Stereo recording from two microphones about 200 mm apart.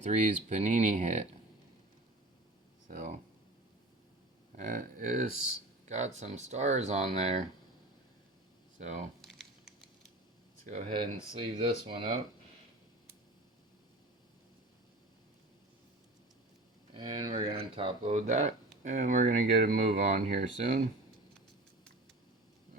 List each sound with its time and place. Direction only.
0.0 s speech: 35° right (ahead or behind)
2.8 s a sound: 40° right (ahead or behind)
4.5 s speech: 40° right (ahead or behind)
8.8 s speech: 35° right (ahead or behind)
9.2 s a sound: centre (ahead or behind)
10.7 s speech: 35° right (ahead or behind)
16.9 s speech: 20° right (ahead or behind); by 20.8 s 35° right (ahead or behind)